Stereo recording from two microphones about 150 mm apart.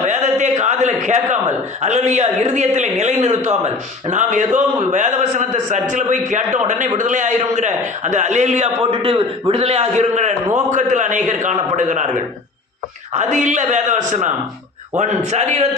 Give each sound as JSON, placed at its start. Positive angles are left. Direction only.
{"t": 0.0, "sound": "a man's voice", "side_deg": -50}
{"t": 13.1, "sound": "a man's voice", "side_deg": -55}